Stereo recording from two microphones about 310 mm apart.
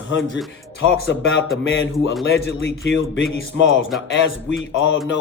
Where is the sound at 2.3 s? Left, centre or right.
Left.